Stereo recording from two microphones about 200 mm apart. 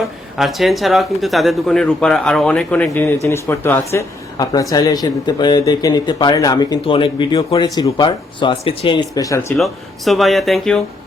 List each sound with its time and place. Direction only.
0.3 s speech: centre (ahead or behind); by 9.5 s 15° left (ahead or behind)
9.6 s speech: centre (ahead or behind)